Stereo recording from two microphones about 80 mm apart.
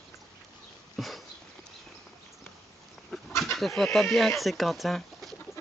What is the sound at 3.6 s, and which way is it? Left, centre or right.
Speech, centre.